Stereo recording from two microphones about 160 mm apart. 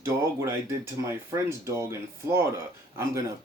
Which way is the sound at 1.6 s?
20° right (ahead or behind).